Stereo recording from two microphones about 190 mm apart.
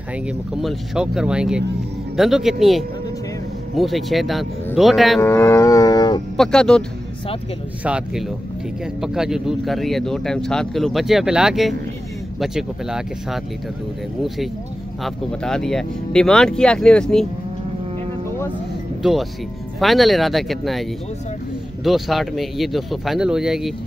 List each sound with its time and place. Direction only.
0.6 s speech: centre (ahead or behind)
5.2 s dog: 15° left (ahead or behind)
6.3 s speech: 5° left (ahead or behind)
7.8 s speech: 5° right (ahead or behind)
15.0 s speech: 5° left (ahead or behind)
19.8 s speech: centre (ahead or behind)
21.8 s speech: centre (ahead or behind)